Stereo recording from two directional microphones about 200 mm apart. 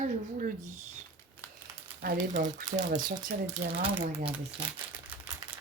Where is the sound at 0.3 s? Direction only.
40° right (ahead or behind).